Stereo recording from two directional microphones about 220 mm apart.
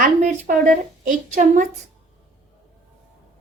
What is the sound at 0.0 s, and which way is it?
A woman's voice, 35° right (ahead or behind).